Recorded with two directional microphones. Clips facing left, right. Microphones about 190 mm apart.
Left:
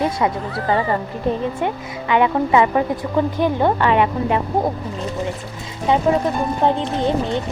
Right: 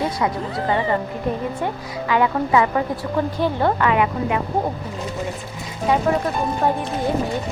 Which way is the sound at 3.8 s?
30° left (ahead or behind).